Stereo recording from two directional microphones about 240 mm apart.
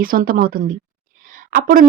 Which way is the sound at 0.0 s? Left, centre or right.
Right.